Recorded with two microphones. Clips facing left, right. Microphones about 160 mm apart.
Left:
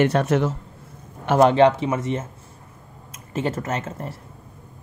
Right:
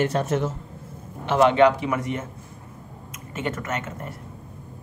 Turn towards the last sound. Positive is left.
turn(degrees=30)  # may be behind; listen again after turning